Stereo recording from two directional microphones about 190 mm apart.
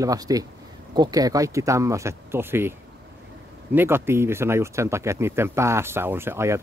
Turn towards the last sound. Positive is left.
turn(degrees=-15)  # may be behind; listen again after turning